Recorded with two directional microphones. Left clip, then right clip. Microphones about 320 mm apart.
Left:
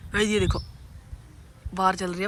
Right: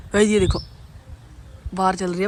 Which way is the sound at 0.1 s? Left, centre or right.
Centre.